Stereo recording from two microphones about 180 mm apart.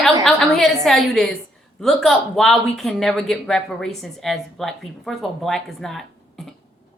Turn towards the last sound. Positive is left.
turn(degrees=0)  # may be behind; listen again after turning